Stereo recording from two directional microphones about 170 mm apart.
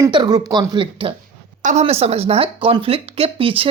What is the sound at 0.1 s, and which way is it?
Speech, 25° right (ahead or behind).